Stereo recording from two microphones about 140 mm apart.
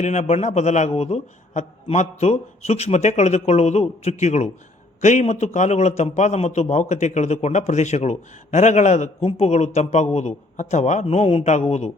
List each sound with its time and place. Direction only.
0.0 s a man's voice: 55° left (ahead or behind)